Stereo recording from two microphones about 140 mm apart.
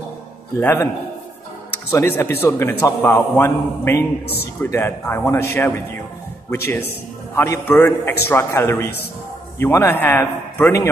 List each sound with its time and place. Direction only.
0.6 s a man's voice: 15° left (ahead or behind)
1.9 s a man's voice: 15° left (ahead or behind)